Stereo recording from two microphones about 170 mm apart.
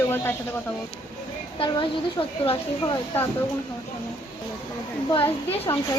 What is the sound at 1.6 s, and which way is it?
A woman's voice, 30° left (ahead or behind).